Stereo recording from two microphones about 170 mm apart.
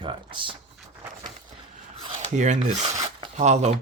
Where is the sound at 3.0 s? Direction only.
40° right (ahead or behind).